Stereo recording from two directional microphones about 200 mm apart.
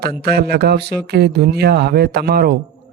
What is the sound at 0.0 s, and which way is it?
Speech, 50° right (ahead or behind).